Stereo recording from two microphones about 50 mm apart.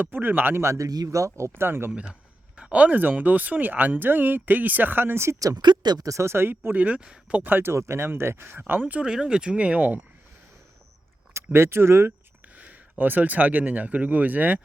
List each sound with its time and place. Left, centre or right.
0.0 s a man's voice: right
0.6 s speech: right
1.9 s speech: centre; by 5.4 s right
6.1 s speech: right
6.7 s speech: right
7.4 s a man's voice: right
7.7 s speech: right
8.4 s speech: right
9.0 s speech: centre; by 10.0 s right
11.5 s speech: right
12.5 s speech: right